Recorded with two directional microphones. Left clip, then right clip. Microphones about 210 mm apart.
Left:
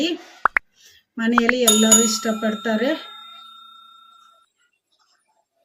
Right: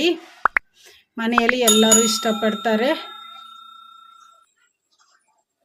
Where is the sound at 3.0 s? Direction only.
Centre (ahead or behind).